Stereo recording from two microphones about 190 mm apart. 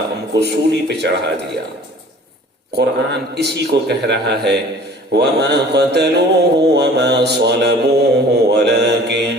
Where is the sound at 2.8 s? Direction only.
60° right (ahead or behind).